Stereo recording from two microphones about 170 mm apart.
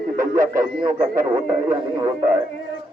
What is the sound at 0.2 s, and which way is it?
Speech, 20° right (ahead or behind).